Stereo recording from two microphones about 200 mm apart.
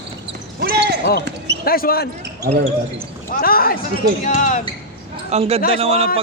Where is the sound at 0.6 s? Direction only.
55° right (ahead or behind).